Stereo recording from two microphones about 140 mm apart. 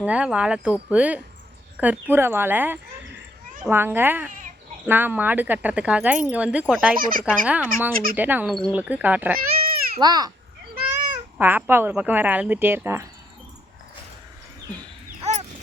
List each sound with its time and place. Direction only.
0.0 s speech: 10° right (ahead or behind)
6.9 s speech: 80° right
7.3 s speech: 10° right (ahead or behind)
8.4 s speech: centre (ahead or behind)
8.7 s speech: 10° right (ahead or behind)
10.0 s a child's voice: 30° right (ahead or behind)
11.3 s speech: 15° right (ahead or behind)
15.2 s dog: 55° right (ahead or behind)